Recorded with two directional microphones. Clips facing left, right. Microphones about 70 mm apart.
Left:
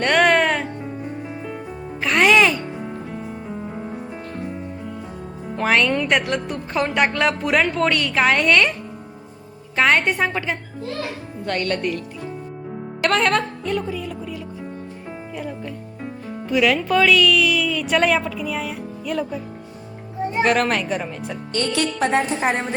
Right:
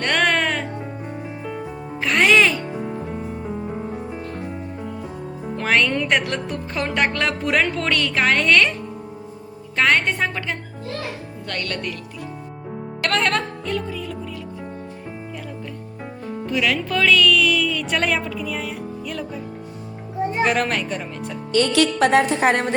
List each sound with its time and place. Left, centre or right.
0.0 s music: centre
2.0 s music: centre
5.5 s a woman's voice: centre
9.7 s a woman's voice: centre
11.4 s a woman's voice: left
13.0 s a woman's voice: centre
16.5 s speech: centre
21.6 s a woman's voice: right